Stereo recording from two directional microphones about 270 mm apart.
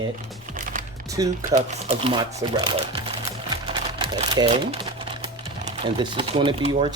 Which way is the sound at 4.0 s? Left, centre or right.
Centre.